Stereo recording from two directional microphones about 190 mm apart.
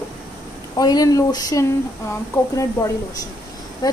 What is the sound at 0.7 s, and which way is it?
Speech, 20° left (ahead or behind).